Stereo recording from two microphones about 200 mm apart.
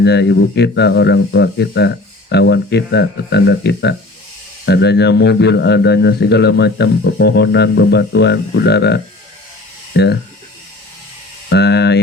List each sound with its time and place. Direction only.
0.0 s a man's voice: 55° left (ahead or behind)
11.4 s a man's voice: 55° left (ahead or behind)